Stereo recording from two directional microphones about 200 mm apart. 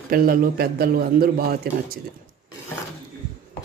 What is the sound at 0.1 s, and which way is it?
Speech, 45° right (ahead or behind).